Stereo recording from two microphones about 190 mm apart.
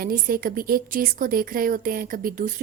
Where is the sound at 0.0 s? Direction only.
50° right (ahead or behind).